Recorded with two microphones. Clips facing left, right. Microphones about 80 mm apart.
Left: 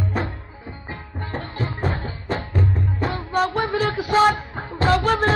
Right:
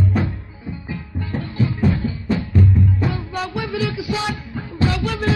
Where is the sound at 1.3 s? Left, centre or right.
Left.